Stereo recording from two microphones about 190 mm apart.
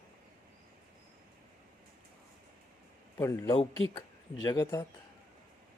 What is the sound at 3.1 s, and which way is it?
A man's voice, 15° left (ahead or behind).